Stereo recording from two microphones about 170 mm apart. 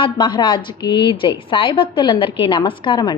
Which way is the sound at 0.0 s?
25° left (ahead or behind).